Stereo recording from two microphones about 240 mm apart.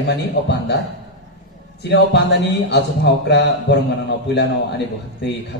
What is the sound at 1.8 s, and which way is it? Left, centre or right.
Speech, left.